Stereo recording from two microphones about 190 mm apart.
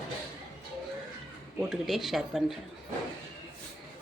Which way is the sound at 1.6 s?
Centre (ahead or behind).